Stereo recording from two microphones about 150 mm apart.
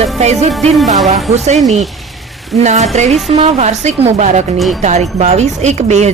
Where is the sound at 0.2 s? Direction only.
50° right (ahead or behind).